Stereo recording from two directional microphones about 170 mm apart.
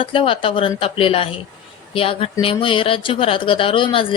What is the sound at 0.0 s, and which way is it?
A woman's voice, 30° left (ahead or behind).